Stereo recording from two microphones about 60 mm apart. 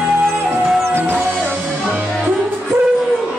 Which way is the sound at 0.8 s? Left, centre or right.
Right.